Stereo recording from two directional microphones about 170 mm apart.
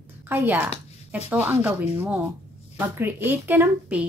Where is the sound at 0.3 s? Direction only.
15° right (ahead or behind).